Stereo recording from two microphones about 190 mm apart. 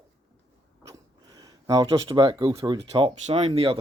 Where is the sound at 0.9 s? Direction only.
20° right (ahead or behind).